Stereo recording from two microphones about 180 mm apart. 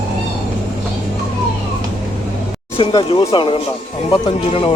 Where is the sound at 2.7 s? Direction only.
30° left (ahead or behind).